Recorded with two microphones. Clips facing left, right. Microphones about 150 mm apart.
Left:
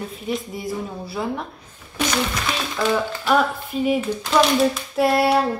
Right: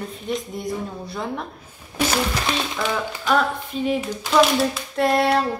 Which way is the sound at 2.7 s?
5° left (ahead or behind).